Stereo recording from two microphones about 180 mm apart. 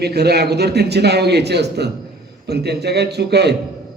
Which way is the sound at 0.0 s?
65° right (ahead or behind).